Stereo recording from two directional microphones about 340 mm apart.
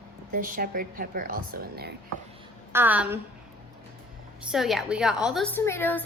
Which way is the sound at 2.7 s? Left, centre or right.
Centre.